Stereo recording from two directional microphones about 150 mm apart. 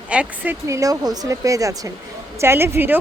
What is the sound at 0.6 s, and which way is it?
A woman's voice, 20° right (ahead or behind).